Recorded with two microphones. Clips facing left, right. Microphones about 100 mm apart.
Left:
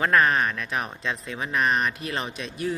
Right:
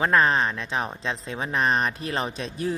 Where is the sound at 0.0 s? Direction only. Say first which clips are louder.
Even; 25° right (ahead or behind).